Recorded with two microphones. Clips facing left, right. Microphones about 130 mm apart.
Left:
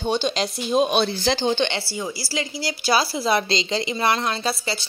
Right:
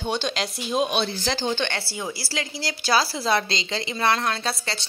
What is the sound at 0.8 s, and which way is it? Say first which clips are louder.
Speech: left 4 dB; 40° left (ahead or behind).